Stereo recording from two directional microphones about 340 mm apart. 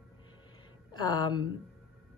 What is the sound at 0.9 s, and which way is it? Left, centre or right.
Speech, centre.